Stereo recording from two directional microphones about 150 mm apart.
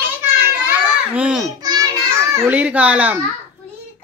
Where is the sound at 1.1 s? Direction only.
5° right (ahead or behind).